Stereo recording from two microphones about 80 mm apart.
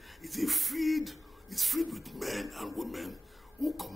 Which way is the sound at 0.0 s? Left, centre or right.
Centre.